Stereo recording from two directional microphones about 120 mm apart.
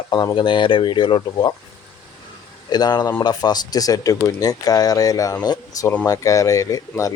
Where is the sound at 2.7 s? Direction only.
35° left (ahead or behind).